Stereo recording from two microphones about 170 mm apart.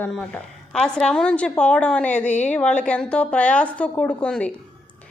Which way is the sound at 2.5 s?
5° left (ahead or behind).